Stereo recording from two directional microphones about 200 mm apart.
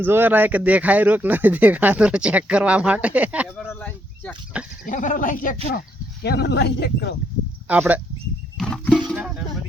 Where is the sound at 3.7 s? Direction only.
10° left (ahead or behind).